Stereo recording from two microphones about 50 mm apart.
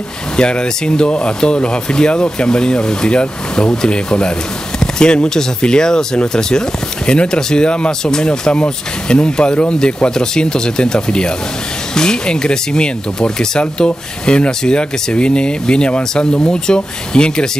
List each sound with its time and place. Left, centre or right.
0.4 s speech: centre